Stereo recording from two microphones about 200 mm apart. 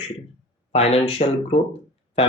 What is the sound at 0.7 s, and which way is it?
Speech, 30° left (ahead or behind).